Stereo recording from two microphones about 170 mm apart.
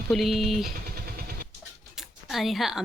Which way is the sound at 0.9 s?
60° right (ahead or behind).